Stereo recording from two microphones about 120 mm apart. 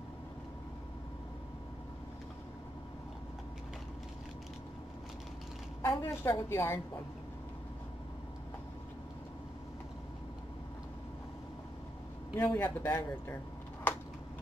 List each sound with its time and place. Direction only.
5.8 s a woman's voice: 25° left (ahead or behind)
12.4 s a man's voice: 15° left (ahead or behind)